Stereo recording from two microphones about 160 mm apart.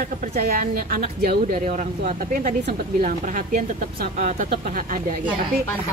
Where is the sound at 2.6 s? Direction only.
60° right (ahead or behind).